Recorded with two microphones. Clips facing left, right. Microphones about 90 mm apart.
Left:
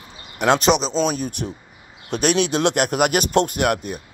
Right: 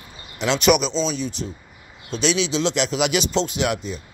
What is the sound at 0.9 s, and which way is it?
Speech, 50° left (ahead or behind).